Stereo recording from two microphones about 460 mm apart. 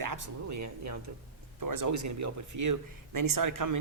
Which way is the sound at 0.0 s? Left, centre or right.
Right.